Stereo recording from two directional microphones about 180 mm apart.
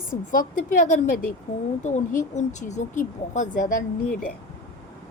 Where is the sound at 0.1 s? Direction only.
50° left (ahead or behind).